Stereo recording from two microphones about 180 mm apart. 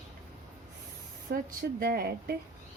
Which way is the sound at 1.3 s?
60° right (ahead or behind).